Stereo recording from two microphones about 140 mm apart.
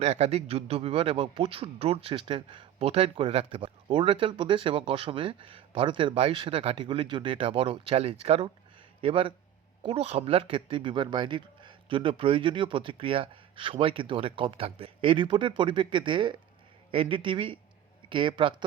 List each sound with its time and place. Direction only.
0.0 s speech: 50° right (ahead or behind)